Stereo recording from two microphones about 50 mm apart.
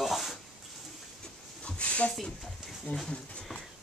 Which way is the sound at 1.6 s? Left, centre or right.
Left.